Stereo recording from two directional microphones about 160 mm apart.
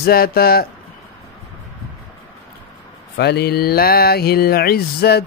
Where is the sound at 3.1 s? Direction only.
90° left.